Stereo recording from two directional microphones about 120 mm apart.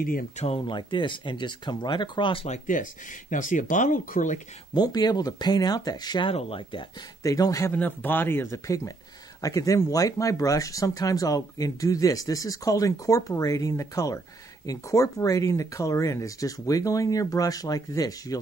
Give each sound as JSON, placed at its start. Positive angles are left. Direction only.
{"t": 0.7, "sound": "speech", "side_deg": 40}
{"t": 2.4, "sound": "speech", "side_deg": 80}
{"t": 4.7, "sound": "speech", "side_deg": 35}
{"t": 7.2, "sound": "speech", "side_deg": 30}
{"t": 7.7, "sound": "speech", "side_deg": 15}